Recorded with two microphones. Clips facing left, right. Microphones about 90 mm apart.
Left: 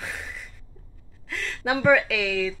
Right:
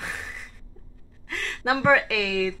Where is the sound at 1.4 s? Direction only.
25° right (ahead or behind).